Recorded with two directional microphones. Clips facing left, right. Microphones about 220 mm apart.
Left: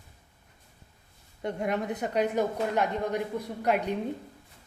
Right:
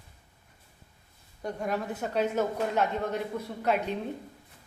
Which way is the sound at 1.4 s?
20° left (ahead or behind).